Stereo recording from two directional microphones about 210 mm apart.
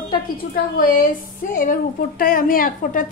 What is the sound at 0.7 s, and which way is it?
Speech, 40° left (ahead or behind).